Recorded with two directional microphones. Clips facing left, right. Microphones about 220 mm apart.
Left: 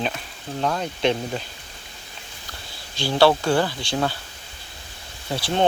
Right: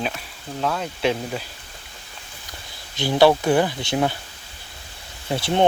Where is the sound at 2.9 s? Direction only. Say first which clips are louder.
Right 2 dB; 20° right (ahead or behind).